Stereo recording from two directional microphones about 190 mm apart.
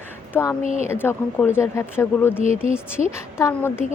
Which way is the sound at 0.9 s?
10° left (ahead or behind).